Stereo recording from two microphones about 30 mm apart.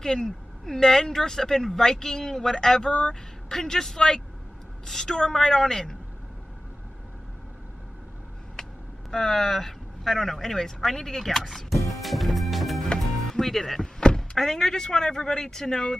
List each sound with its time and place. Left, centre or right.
0.0 s speech: centre
2.9 s speech: left
3.4 s speech: centre
9.1 s speech: centre